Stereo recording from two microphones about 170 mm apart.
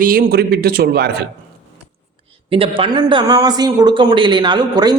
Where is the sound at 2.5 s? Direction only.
30° right (ahead or behind).